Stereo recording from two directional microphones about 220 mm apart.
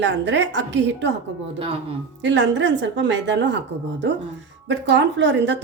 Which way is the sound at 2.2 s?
55° right (ahead or behind).